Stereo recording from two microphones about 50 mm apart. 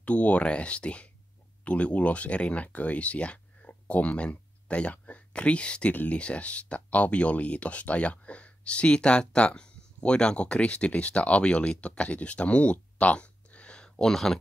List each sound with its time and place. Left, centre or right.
0.0 s speech: left; by 14.4 s centre